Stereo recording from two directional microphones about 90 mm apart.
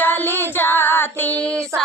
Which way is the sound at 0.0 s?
25° left (ahead or behind).